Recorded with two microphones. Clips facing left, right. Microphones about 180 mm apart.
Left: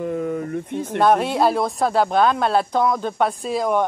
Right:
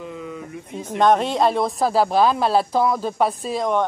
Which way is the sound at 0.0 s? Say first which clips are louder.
Left 9 dB; 50° left (ahead or behind).